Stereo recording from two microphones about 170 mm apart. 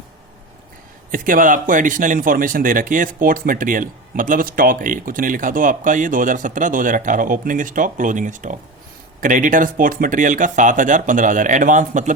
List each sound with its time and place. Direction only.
1.1 s speech: 55° right (ahead or behind)